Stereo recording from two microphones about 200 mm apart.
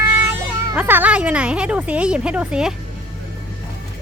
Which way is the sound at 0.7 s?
10° right (ahead or behind).